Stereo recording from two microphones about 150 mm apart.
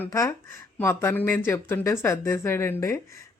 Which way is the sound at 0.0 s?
20° left (ahead or behind).